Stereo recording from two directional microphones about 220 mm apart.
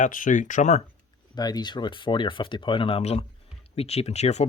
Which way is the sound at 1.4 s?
20° left (ahead or behind).